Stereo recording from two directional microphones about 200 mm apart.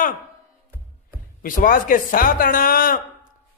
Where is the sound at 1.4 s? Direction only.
45° left (ahead or behind).